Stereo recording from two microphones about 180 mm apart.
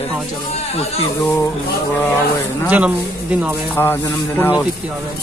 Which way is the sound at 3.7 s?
10° left (ahead or behind).